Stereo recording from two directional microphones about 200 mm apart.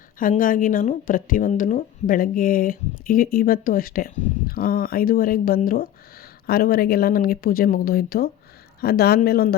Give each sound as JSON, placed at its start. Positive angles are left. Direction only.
{"t": 0.2, "sound": "speech", "side_deg": 45}